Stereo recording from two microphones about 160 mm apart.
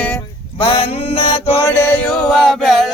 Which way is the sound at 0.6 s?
35° left (ahead or behind).